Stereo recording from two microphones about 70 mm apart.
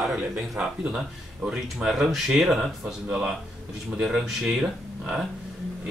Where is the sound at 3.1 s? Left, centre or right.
Centre.